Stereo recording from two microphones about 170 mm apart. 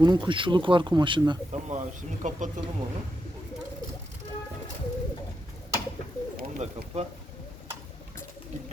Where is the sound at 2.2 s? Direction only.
45° right (ahead or behind).